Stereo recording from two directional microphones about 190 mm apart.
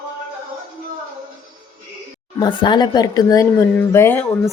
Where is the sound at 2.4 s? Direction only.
25° left (ahead or behind).